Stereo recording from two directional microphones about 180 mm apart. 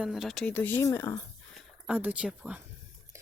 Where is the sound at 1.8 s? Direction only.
5° right (ahead or behind).